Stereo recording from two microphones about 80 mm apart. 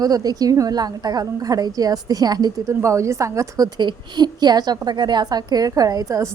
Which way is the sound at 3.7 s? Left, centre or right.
Right.